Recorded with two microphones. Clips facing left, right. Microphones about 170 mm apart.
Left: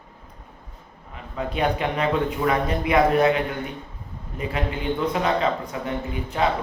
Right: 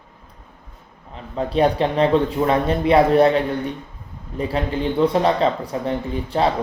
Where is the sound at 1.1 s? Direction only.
35° right (ahead or behind).